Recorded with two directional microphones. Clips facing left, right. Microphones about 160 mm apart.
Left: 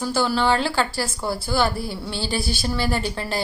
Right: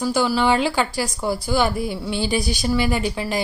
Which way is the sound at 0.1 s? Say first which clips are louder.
Right 1 dB; 10° right (ahead or behind).